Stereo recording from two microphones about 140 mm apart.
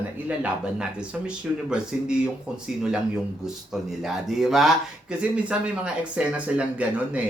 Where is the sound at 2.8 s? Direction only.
5° right (ahead or behind).